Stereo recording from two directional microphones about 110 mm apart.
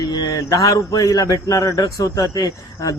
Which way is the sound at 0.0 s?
35° left (ahead or behind).